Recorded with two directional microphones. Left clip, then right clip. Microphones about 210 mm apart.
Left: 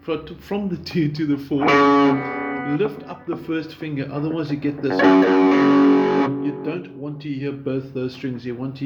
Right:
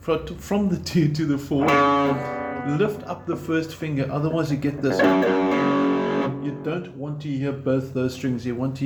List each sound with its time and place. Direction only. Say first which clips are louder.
0.1 s speech: right 2 dB; 15° left (ahead or behind)
1.5 s speech: left 3 dB; 35° left (ahead or behind)
2.7 s speech: even; 10° left (ahead or behind)
4.9 s music: left 5 dB; 35° left (ahead or behind)
7.3 s speech: right 3 dB; 15° left (ahead or behind)